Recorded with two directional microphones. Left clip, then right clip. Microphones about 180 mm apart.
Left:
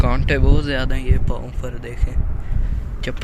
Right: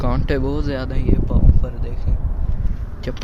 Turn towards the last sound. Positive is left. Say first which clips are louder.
# left 1 dB
turn(degrees=-10)  # may be behind; listen again after turning